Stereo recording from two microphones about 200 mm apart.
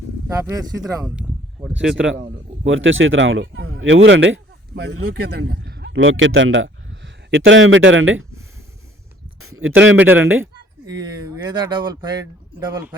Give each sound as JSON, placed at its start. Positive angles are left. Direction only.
{"t": 0.3, "sound": "speech", "side_deg": -15}
{"t": 1.8, "sound": "speech", "side_deg": -5}
{"t": 2.0, "sound": "speech", "side_deg": -60}
{"t": 9.4, "sound": "a sound", "side_deg": -90}
{"t": 10.0, "sound": "speech", "side_deg": -10}
{"t": 10.4, "sound": "speech", "side_deg": -20}